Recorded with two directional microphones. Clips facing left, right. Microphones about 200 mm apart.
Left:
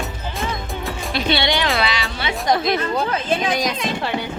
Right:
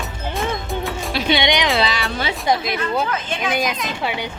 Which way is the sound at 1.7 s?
35° right (ahead or behind).